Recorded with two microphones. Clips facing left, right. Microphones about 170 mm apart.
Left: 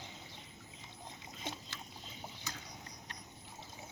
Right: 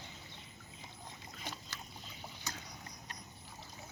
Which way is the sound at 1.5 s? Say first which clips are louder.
Left 3 dB; 25° left (ahead or behind).